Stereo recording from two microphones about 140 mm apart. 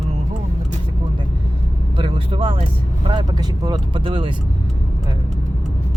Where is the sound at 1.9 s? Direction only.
40° right (ahead or behind).